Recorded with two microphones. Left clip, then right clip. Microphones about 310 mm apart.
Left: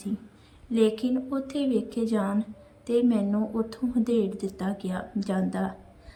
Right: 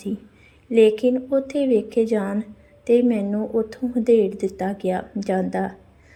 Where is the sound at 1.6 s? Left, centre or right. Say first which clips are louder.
Right 7 dB; right.